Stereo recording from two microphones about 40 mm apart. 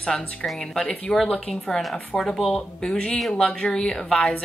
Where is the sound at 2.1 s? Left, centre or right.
Centre.